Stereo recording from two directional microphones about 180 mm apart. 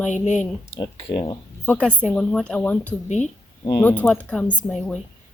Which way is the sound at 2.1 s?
Centre (ahead or behind).